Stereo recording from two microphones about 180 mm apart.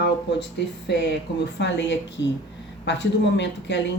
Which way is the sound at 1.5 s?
75° left (ahead or behind).